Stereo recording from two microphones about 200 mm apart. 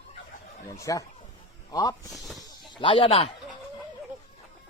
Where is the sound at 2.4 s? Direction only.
20° left (ahead or behind).